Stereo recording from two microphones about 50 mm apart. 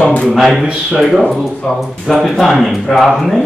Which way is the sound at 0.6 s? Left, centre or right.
Centre.